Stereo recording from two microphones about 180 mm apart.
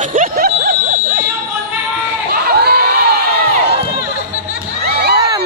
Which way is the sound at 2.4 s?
60° right (ahead or behind).